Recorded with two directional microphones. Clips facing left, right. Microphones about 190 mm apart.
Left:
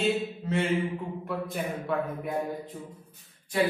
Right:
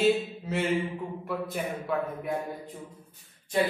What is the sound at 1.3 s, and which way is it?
Speech, centre (ahead or behind).